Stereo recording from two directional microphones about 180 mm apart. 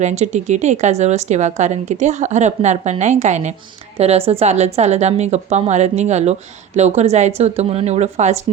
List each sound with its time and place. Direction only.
0.0 s a woman's voice: 40° right (ahead or behind)